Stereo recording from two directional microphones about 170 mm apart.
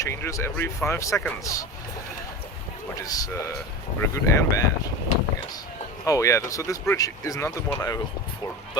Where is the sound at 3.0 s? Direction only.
20° left (ahead or behind).